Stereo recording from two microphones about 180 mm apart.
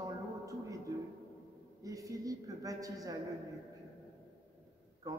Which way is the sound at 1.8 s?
20° right (ahead or behind).